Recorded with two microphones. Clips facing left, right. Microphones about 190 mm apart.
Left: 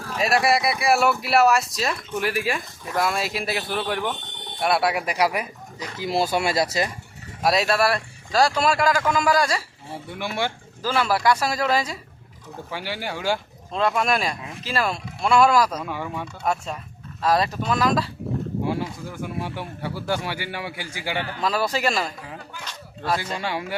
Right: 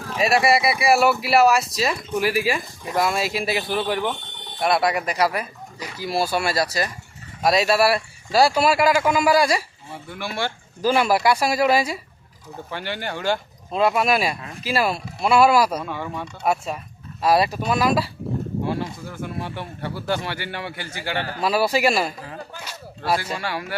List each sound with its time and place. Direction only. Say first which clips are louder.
0.1 s a man's voice: right 2 dB; centre (ahead or behind)
3.1 s speech: right 3 dB; centre (ahead or behind); by 6.9 s 20° left (ahead or behind)
7.4 s a man's voice: right 2 dB; centre (ahead or behind)
10.1 s speech: left 1 dB; 20° left (ahead or behind)
10.8 s a man's voice: right 3 dB; 15° right (ahead or behind)
12.7 s speech: right 1 dB; 5° left (ahead or behind)
13.7 s a man's voice: right 3 dB; 5° right (ahead or behind)
15.8 s speech: even; 10° left (ahead or behind)
16.4 s a man's voice: right 3 dB; 10° right (ahead or behind)
18.6 s speech: even; 10° left (ahead or behind)
21.4 s a man's voice: right 4 dB; 10° right (ahead or behind)
23.4 s speech: left 1 dB; 20° left (ahead or behind)